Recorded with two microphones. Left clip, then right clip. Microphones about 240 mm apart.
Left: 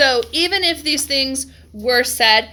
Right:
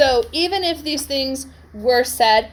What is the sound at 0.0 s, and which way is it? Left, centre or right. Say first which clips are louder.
A woman's voice: left 1 dB; left.